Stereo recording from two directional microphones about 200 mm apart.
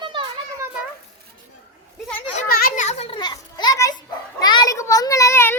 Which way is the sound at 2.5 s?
45° left (ahead or behind).